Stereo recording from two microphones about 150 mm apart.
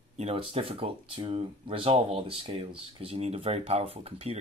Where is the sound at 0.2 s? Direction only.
40° right (ahead or behind).